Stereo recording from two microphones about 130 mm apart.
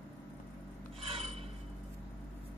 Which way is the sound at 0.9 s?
50° right (ahead or behind).